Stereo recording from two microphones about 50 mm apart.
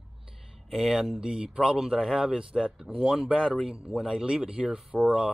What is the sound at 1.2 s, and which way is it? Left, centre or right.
Speech, centre.